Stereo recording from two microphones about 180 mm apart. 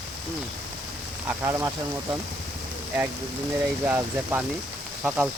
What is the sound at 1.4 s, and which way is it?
Speech, 15° right (ahead or behind).